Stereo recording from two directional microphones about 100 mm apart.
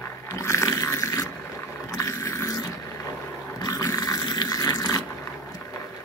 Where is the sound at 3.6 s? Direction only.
35° left (ahead or behind).